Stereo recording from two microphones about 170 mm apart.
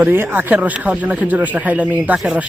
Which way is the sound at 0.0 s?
10° right (ahead or behind).